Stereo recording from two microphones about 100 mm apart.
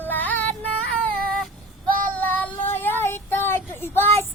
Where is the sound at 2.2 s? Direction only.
15° left (ahead or behind).